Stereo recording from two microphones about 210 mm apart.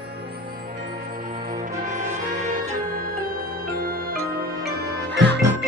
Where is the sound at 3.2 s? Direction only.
45° right (ahead or behind).